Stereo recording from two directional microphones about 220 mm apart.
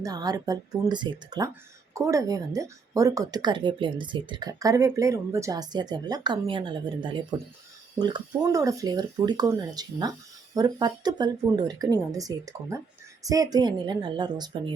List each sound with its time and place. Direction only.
0.0 s a woman's voice: 15° right (ahead or behind)